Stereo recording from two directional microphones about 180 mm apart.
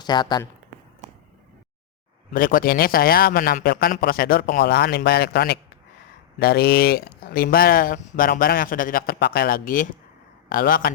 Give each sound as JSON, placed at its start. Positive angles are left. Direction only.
{"t": 0.0, "sound": "speech", "side_deg": 25}
{"t": 2.3, "sound": "a man's voice", "side_deg": 50}